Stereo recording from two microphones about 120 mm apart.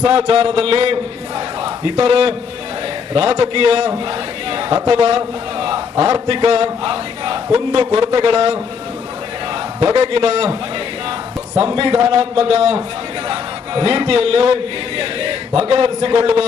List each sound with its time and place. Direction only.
0.0 s music: 50° right (ahead or behind)
4.5 s a man's voice: 45° right (ahead or behind)
5.1 s a sound: 50° right (ahead or behind)
6.0 s speech: 30° right (ahead or behind)
6.2 s a man's voice: 50° right (ahead or behind)
7.9 s music: 45° right (ahead or behind)
10.0 s a man's voice: 55° right (ahead or behind)
11.6 s music: 50° right (ahead or behind)
12.4 s a man's voice: 55° right (ahead or behind)